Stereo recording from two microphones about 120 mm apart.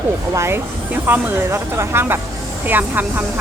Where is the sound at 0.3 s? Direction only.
20° right (ahead or behind).